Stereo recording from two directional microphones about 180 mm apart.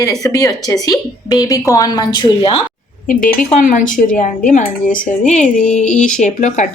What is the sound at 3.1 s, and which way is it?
Speech, 50° left (ahead or behind).